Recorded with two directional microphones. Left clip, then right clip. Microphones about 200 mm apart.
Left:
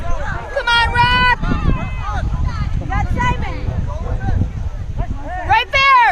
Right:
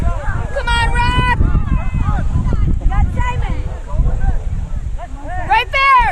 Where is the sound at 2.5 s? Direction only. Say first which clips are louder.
Left 4 dB; 5° left (ahead or behind).